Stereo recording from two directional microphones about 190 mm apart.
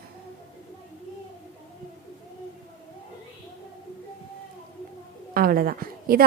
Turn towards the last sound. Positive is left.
turn(degrees=-50)  # may be behind; listen again after turning